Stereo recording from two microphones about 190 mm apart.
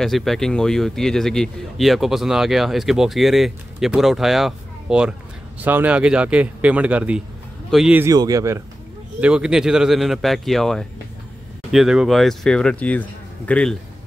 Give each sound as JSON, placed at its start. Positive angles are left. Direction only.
{"t": 0.0, "sound": "a man's voice", "side_deg": 0}
{"t": 8.1, "sound": "a man's voice", "side_deg": -20}
{"t": 9.2, "sound": "speech", "side_deg": -5}